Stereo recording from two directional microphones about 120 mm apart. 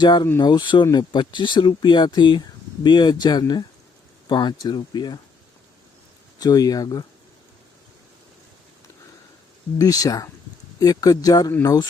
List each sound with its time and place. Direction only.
0.0 s speech: 35° left (ahead or behind)
6.4 s speech: 30° left (ahead or behind)
9.7 s speech: 30° left (ahead or behind)